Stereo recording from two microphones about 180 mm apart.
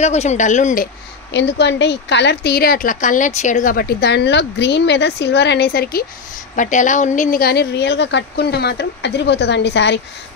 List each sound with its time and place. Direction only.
0.0 s speech: 40° left (ahead or behind)
1.3 s a woman's voice: 80° left; by 6.0 s 55° left (ahead or behind)
6.5 s a woman's voice: 45° left (ahead or behind); by 9.9 s 75° left (ahead or behind)